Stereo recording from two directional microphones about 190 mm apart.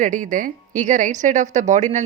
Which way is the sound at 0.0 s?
40° right (ahead or behind).